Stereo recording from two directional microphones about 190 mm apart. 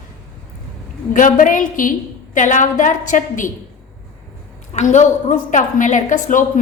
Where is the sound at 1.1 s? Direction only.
45° left (ahead or behind).